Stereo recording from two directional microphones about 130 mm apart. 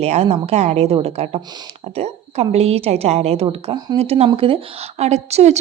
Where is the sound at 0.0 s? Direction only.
55° right (ahead or behind).